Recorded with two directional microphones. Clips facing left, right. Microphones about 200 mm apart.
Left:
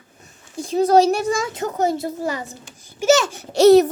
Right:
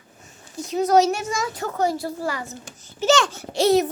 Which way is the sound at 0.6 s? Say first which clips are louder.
Left 3 dB; 30° left (ahead or behind).